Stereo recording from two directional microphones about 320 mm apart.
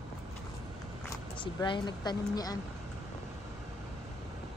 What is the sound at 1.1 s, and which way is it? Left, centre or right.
Speech, centre.